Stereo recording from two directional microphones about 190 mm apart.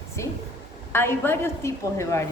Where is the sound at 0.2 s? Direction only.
15° left (ahead or behind).